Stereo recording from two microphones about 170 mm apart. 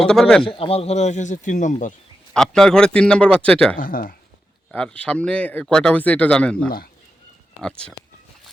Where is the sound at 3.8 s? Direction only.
55° left (ahead or behind).